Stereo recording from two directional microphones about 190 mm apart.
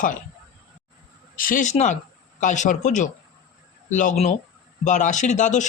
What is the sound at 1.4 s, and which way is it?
Speech, 45° left (ahead or behind).